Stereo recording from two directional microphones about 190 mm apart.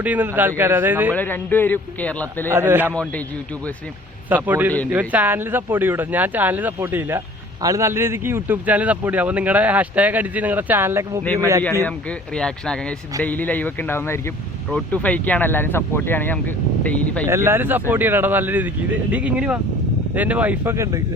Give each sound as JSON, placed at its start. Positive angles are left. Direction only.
{"t": 0.0, "sound": "a man's voice", "side_deg": -10}
{"t": 1.1, "sound": "speech", "side_deg": 10}
{"t": 2.5, "sound": "a man's voice", "side_deg": -10}
{"t": 4.4, "sound": "a man's voice", "side_deg": -10}
{"t": 11.9, "sound": "speech", "side_deg": 5}
{"t": 17.2, "sound": "a man's voice", "side_deg": -15}